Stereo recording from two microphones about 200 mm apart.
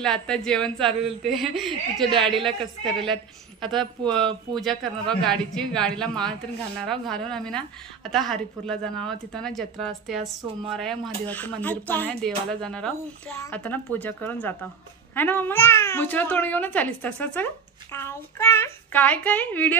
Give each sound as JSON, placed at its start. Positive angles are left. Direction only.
{"t": 0.0, "sound": "a woman's voice", "side_deg": 5}
{"t": 0.8, "sound": "a woman's voice", "side_deg": -30}
{"t": 1.6, "sound": "a woman's voice", "side_deg": 0}
{"t": 4.0, "sound": "a woman's voice", "side_deg": -25}
{"t": 4.6, "sound": "a woman's voice", "side_deg": 0}